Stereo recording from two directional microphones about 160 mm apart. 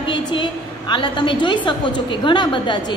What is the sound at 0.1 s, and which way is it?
A woman's voice, 30° left (ahead or behind).